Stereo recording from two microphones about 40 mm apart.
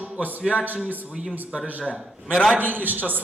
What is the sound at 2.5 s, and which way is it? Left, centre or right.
Speech, right.